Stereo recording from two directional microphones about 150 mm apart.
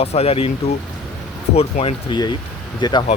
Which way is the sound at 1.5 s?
40° left (ahead or behind).